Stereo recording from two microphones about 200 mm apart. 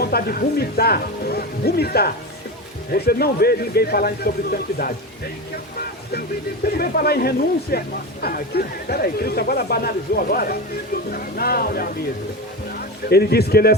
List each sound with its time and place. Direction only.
0.0 s a man's voice: 50° left (ahead or behind)
6.7 s a man's voice: 50° left (ahead or behind)
13.1 s a man's voice: 50° left (ahead or behind)